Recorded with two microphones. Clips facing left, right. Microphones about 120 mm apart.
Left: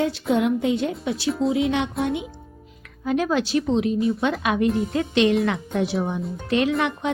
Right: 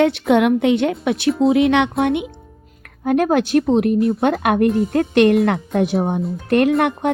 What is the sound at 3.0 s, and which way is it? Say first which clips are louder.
A woman's voice: right 6 dB; 55° right (ahead or behind).